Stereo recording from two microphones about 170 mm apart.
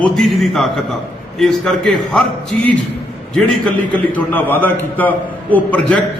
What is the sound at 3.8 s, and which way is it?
A man's voice, 10° left (ahead or behind).